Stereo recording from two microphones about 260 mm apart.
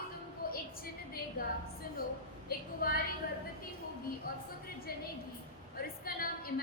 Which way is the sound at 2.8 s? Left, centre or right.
Left.